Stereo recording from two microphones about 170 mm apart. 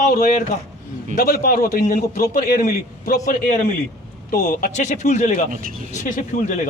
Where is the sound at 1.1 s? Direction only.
60° left (ahead or behind).